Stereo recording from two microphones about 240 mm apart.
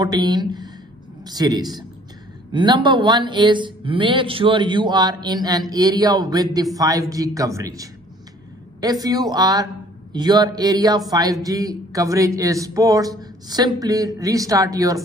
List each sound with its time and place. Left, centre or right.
0.0 s speech: centre